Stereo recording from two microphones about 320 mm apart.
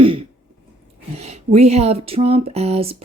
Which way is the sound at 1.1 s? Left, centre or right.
Centre.